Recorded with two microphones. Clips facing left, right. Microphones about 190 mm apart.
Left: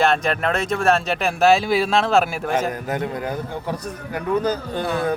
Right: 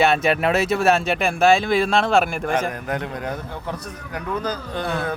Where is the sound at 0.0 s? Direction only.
5° right (ahead or behind).